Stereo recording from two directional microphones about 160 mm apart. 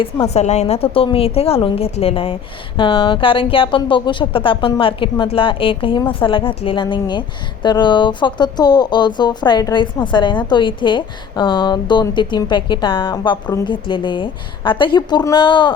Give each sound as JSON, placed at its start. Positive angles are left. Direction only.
{"t": 0.3, "sound": "a woman's voice", "side_deg": 45}